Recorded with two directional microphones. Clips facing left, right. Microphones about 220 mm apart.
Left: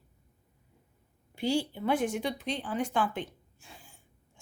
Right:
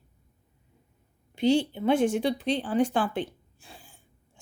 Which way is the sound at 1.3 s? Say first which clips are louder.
Right 6 dB; 20° right (ahead or behind).